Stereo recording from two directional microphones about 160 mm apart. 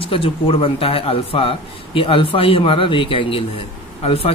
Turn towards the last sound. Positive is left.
turn(degrees=40)  # may be behind; listen again after turning